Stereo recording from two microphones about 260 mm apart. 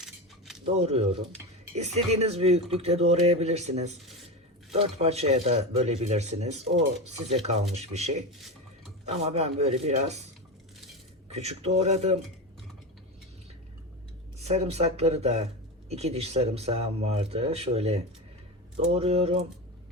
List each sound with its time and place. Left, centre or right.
0.6 s speech: right
8.4 s a sound: centre
9.0 s speech: right
11.3 s speech: right
14.4 s speech: right